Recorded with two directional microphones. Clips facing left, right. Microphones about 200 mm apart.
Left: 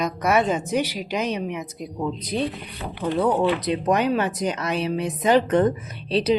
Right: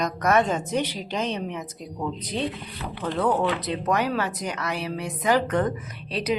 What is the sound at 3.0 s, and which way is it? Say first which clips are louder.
A woman's voice: left 3 dB; 10° left (ahead or behind).